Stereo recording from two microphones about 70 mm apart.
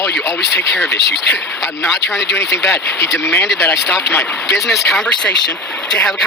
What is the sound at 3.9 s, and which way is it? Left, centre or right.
Speech, centre.